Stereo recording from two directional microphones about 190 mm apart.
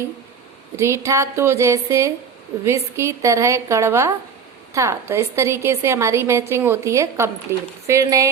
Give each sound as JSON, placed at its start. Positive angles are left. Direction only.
{"t": 0.8, "sound": "a woman's voice", "side_deg": -15}